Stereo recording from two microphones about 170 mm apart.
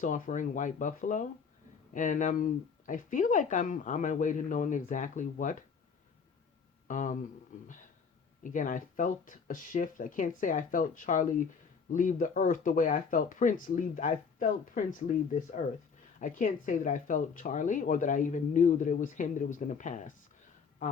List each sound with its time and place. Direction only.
0.0 s speech: 45° left (ahead or behind)
6.8 s speech: 50° left (ahead or behind)
8.4 s speech: 50° left (ahead or behind)